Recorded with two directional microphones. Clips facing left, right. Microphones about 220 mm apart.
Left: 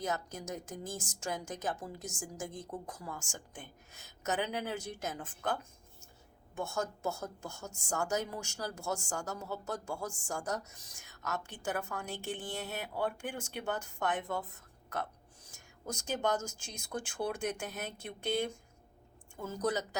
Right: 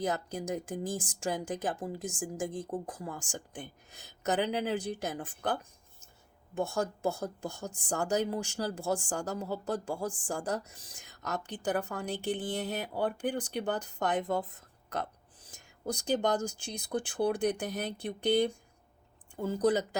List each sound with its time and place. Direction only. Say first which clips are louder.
0.0 s speech: right 4 dB; 35° right (ahead or behind)
6.6 s speech: right 5 dB; 35° right (ahead or behind)
15.9 s speech: right 4 dB; 35° right (ahead or behind)